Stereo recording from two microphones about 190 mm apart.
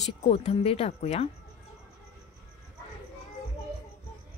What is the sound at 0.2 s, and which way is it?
Speech, 30° left (ahead or behind).